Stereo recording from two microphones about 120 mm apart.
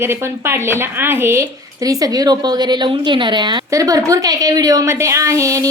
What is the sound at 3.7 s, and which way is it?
A woman's voice, 30° right (ahead or behind).